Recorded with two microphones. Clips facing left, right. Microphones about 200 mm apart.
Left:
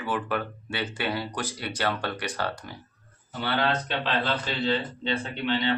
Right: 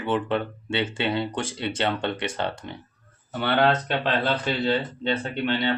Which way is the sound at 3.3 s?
60° right (ahead or behind).